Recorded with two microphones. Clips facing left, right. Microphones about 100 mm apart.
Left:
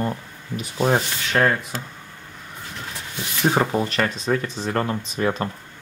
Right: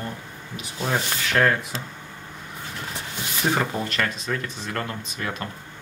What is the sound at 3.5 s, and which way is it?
Speech, 25° left (ahead or behind).